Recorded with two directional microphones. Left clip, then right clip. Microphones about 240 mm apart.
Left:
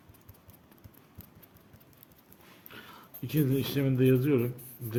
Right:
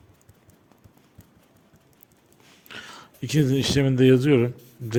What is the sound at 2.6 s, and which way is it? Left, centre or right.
Speech, right.